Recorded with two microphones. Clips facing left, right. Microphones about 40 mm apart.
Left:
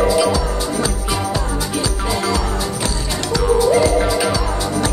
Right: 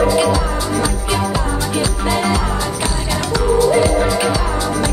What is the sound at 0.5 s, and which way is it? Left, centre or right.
Music, centre.